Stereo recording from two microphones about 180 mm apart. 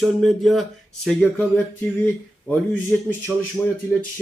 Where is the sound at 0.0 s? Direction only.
Centre (ahead or behind).